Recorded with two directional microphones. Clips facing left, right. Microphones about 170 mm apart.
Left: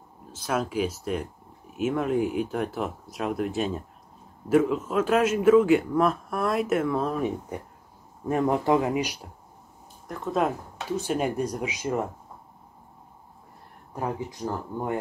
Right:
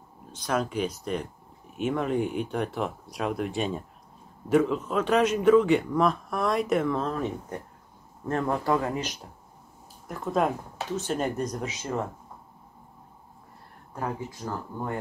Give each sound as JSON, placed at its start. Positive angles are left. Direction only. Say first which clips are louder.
{"t": 0.3, "sound": "a man's voice", "louder": "even", "side_deg": 5}
{"t": 10.0, "sound": "speech", "louder": "even", "side_deg": 0}
{"t": 13.9, "sound": "speech", "louder": "left 2 dB", "side_deg": 20}